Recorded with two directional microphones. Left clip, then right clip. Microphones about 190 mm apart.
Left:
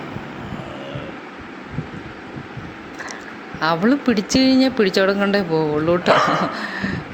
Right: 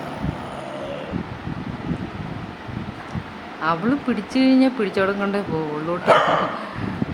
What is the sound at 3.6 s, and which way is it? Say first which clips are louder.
Speech: left 4 dB; 25° left (ahead or behind).